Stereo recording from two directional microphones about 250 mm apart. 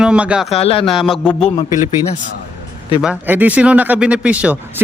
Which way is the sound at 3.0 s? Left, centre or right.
Centre.